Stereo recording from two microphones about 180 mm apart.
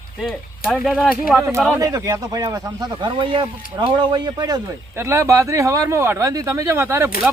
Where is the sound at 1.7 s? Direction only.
20° right (ahead or behind).